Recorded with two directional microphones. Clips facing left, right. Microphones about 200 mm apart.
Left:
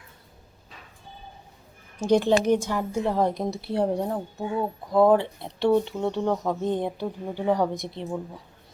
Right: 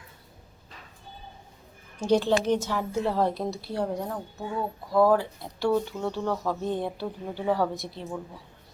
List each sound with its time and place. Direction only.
2.0 s a woman's voice: 10° left (ahead or behind)